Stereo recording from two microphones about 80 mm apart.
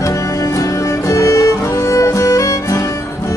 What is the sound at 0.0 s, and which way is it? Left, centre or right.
Music, left.